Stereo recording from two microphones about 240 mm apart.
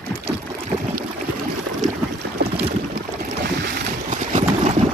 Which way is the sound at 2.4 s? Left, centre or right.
Right.